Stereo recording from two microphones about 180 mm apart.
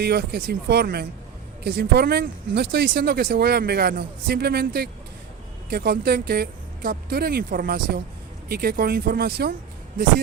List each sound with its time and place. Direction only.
0.0 s speech: 65° right (ahead or behind)